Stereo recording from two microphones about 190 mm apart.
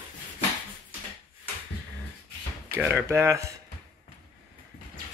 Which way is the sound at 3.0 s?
15° right (ahead or behind).